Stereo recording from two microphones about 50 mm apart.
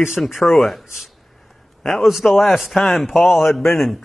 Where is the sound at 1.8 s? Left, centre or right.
Centre.